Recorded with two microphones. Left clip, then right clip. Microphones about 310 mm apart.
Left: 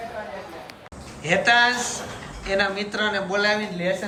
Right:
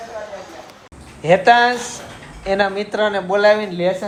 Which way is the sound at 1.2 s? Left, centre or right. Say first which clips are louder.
Right 6 dB; centre.